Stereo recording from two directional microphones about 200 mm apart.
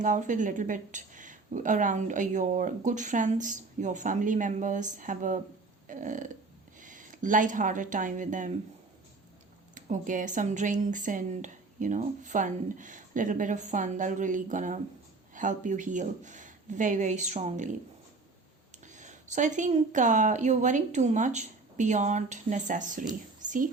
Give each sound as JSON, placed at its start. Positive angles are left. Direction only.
{"t": 0.0, "sound": "a woman's voice", "side_deg": -40}
{"t": 9.7, "sound": "a woman's voice", "side_deg": -40}
{"t": 18.9, "sound": "a woman's voice", "side_deg": -35}